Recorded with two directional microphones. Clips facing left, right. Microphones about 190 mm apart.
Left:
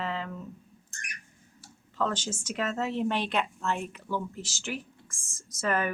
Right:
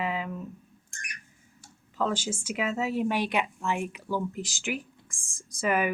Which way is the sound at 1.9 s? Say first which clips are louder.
Right 2 dB; 10° right (ahead or behind).